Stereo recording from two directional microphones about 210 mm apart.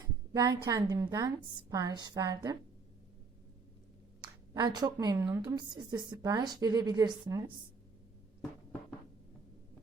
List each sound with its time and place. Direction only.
0.3 s a woman's voice: 15° right (ahead or behind)
4.2 s a woman's voice: 20° right (ahead or behind)